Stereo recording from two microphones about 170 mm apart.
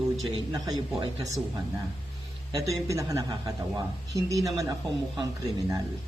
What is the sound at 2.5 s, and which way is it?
A man's voice, 20° right (ahead or behind).